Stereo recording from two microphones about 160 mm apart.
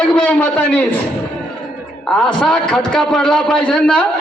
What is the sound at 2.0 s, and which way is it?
A man's voice, 5° left (ahead or behind).